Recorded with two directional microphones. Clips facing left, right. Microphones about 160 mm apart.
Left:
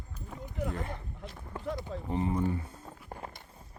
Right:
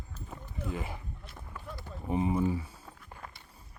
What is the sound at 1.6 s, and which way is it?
Run, 90° left.